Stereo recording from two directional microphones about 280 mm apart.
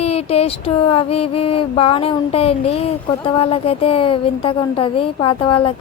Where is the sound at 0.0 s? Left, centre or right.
Left.